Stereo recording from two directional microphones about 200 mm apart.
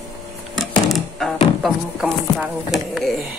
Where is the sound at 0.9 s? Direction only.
Centre (ahead or behind).